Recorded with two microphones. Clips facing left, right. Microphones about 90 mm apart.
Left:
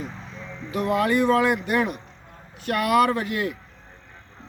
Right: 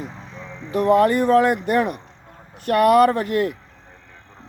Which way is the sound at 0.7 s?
45° right (ahead or behind).